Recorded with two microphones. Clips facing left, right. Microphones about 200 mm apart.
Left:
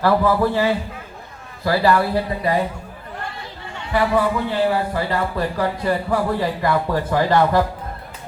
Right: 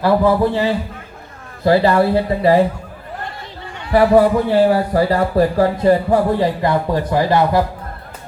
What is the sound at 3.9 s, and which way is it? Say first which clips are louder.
Speech: right 7 dB; 40° right (ahead or behind).